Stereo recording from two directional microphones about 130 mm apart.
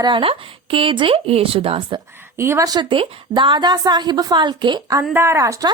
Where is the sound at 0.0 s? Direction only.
40° right (ahead or behind).